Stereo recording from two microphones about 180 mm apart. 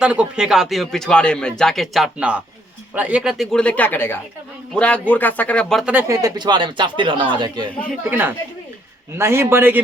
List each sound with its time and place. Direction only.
0.0 s speech: 5° right (ahead or behind)
5.9 s speech: 15° right (ahead or behind)
8.1 s a man's voice: 10° right (ahead or behind)